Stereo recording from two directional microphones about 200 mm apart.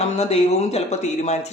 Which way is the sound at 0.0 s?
30° left (ahead or behind).